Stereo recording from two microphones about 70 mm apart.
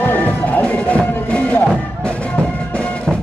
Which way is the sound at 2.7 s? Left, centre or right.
Centre.